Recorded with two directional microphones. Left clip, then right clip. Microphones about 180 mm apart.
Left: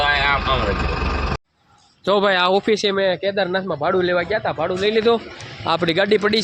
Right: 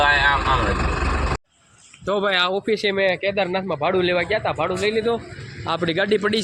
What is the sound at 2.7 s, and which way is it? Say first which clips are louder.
Speech: left 2 dB; 40° left (ahead or behind).